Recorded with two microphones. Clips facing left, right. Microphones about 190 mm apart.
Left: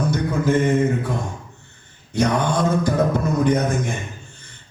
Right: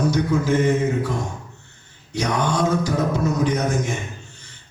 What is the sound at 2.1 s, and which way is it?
Mantra, 55° left (ahead or behind).